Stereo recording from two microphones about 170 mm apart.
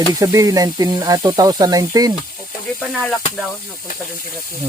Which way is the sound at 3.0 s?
Centre (ahead or behind).